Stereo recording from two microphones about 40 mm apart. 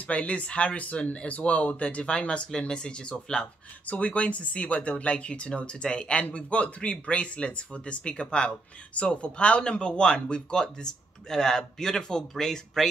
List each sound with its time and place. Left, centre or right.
0.0 s speech: left
3.8 s speech: left; by 12.8 s centre